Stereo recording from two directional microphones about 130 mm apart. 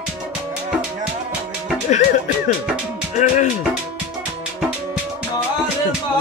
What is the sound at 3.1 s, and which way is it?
Speech, 70° left (ahead or behind).